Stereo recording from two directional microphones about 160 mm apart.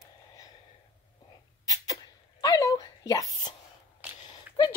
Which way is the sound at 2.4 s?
25° left (ahead or behind).